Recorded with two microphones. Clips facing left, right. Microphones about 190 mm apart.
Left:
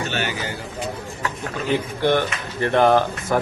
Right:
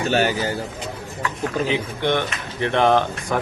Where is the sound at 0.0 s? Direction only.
40° right (ahead or behind).